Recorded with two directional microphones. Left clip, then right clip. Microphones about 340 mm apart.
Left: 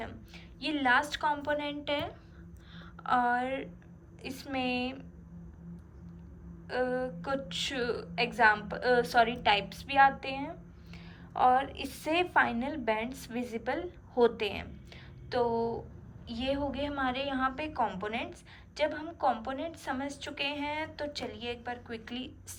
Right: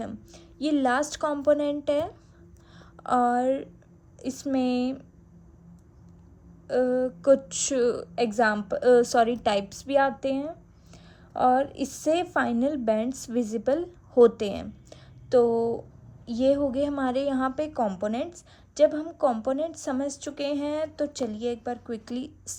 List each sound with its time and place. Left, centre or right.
0.0 s a woman's voice: centre
6.7 s a woman's voice: right
11.8 s a woman's voice: right